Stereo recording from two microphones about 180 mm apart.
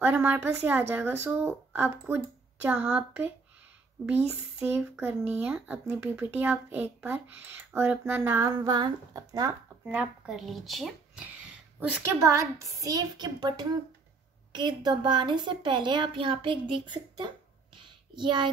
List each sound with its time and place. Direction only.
0.0 s a woman's voice: 10° right (ahead or behind)
9.8 s a woman's voice: 5° right (ahead or behind); by 17.3 s 25° right (ahead or behind)
17.7 s a sound: 25° right (ahead or behind)